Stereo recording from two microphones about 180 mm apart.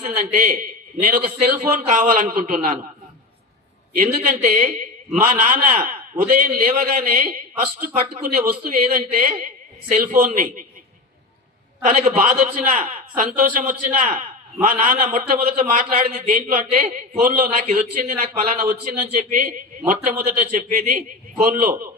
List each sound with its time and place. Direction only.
0.0 s a man's voice: 45° right (ahead or behind)
4.0 s a man's voice: 50° right (ahead or behind)
11.9 s a man's voice: 45° right (ahead or behind)